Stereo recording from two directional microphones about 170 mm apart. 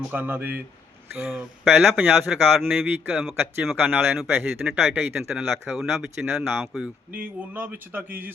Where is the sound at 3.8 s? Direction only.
10° right (ahead or behind).